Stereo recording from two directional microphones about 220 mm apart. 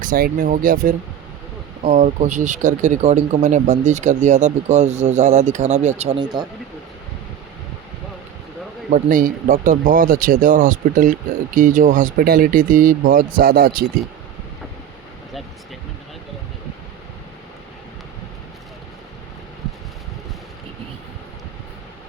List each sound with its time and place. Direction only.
0.0 s speech: 40° right (ahead or behind); by 6.5 s 20° right (ahead or behind)
8.9 s speech: 40° right (ahead or behind)